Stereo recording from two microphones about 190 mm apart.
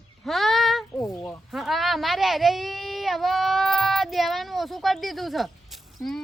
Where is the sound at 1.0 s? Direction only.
15° left (ahead or behind).